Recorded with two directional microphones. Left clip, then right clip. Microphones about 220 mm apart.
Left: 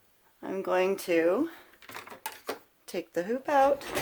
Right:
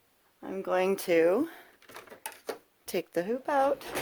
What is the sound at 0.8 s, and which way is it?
Speech, 35° right (ahead or behind).